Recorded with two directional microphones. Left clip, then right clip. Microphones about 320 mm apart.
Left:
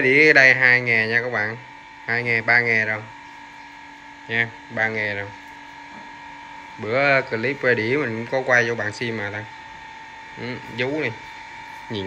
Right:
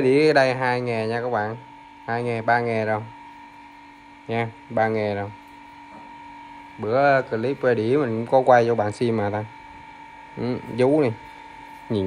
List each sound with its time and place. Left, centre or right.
0.0 s speech: centre
4.3 s speech: centre
6.8 s speech: centre
10.4 s speech: centre